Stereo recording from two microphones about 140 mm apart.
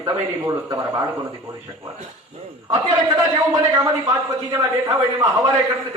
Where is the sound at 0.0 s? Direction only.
25° right (ahead or behind).